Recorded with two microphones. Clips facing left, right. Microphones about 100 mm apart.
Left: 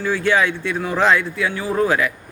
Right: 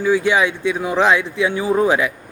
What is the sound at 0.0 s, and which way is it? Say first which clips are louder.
Speech: right 2 dB; 15° right (ahead or behind).